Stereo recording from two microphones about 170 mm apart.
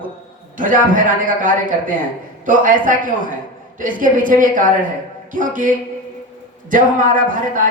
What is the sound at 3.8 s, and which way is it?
A man's voice, 50° right (ahead or behind).